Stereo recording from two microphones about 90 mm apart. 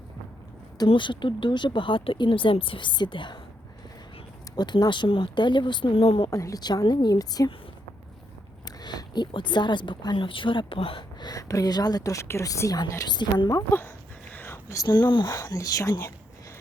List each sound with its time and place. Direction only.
0.9 s speech: 65° left (ahead or behind)
4.5 s speech: 50° left (ahead or behind); by 6.3 s 85° left
6.3 s a woman's voice: 35° left (ahead or behind)
6.6 s a woman's voice: 50° left (ahead or behind)
8.6 s speech: 50° left (ahead or behind); by 11.0 s 80° left
11.2 s a woman's voice: 45° left (ahead or behind)
13.1 s speech: 55° left (ahead or behind)
13.7 s speech: 25° left (ahead or behind)
14.3 s a sound: 25° left (ahead or behind)
14.8 s speech: 60° left (ahead or behind)
15.3 s a woman's voice: 35° left (ahead or behind)